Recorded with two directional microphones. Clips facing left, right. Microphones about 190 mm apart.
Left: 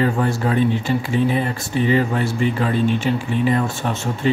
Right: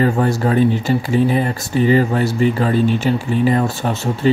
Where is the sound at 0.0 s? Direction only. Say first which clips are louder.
Right 3 dB; 40° right (ahead or behind).